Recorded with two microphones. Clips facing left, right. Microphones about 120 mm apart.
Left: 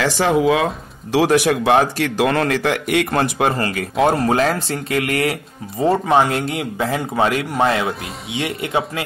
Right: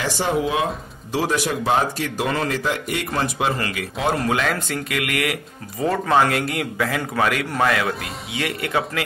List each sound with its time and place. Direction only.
0.0 s speech: 90° left
1.1 s speech: 75° left (ahead or behind)
3.1 s speech: 55° left (ahead or behind)
3.5 s speech: 40° left (ahead or behind)
6.0 s a man's voice: 20° left (ahead or behind)